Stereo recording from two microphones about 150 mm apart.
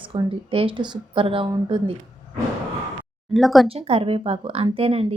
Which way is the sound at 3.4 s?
Centre (ahead or behind).